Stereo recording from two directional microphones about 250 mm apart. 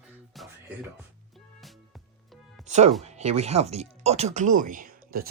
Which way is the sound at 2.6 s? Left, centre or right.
Right.